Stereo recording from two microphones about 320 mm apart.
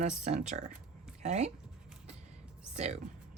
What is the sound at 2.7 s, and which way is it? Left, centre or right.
Speech, centre.